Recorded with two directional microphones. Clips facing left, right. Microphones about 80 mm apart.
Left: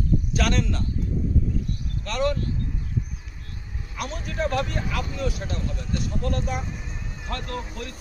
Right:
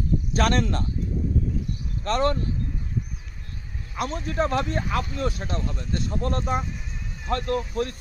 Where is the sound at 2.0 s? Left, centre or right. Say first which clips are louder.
Right 2 dB; right.